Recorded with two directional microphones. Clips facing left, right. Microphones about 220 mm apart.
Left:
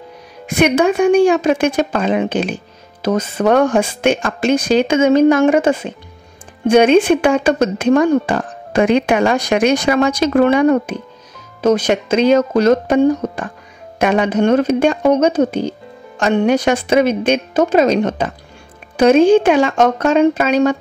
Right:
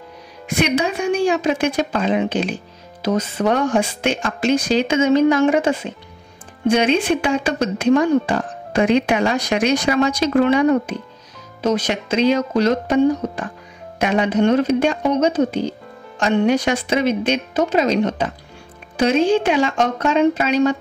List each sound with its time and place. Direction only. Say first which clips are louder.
0.6 s speech: left 7 dB; 50° left (ahead or behind)